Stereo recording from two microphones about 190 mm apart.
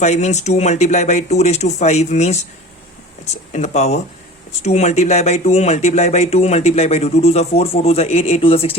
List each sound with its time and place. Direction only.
0.0 s speech: 35° left (ahead or behind)
3.5 s speech: 40° left (ahead or behind)